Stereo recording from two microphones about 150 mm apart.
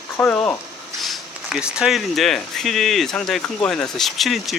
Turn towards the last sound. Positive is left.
turn(degrees=0)  # may be behind; listen again after turning